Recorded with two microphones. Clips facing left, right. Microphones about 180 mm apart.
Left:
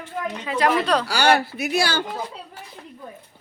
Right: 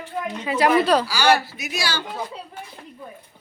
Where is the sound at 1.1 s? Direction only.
60° left (ahead or behind).